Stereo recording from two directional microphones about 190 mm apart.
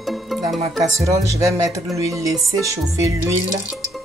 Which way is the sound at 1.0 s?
15° right (ahead or behind).